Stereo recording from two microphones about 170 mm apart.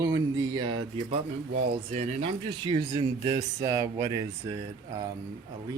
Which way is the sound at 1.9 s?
45° right (ahead or behind).